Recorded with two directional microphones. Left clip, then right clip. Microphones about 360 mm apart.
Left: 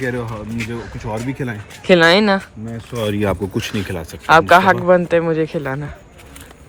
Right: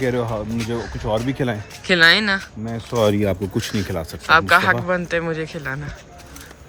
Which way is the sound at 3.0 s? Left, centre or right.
Centre.